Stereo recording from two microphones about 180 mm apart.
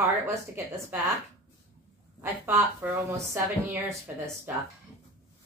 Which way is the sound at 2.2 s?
15° right (ahead or behind).